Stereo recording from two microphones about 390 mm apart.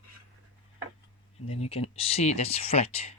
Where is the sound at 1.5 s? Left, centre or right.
Centre.